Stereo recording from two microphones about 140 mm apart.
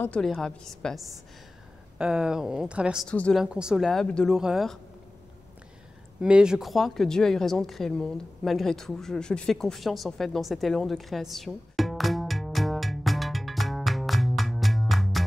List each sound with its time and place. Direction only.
0.0 s speech: 5° left (ahead or behind)
2.0 s speech: 5° right (ahead or behind)
3.1 s a woman's voice: 5° left (ahead or behind)
3.4 s speech: 5° right (ahead or behind)
6.2 s a sound: 5° right (ahead or behind)